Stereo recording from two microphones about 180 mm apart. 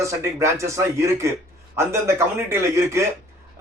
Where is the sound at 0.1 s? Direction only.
15° right (ahead or behind).